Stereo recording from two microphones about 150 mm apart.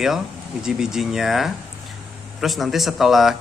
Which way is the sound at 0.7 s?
5° right (ahead or behind).